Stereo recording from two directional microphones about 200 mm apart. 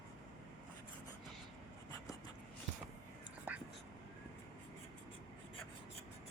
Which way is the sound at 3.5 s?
10° right (ahead or behind).